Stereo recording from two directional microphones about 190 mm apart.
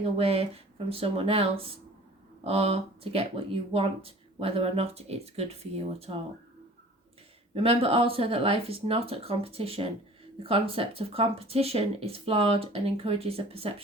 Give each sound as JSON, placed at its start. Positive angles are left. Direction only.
{"t": 0.2, "sound": "speech", "side_deg": -30}
{"t": 7.5, "sound": "speech", "side_deg": -30}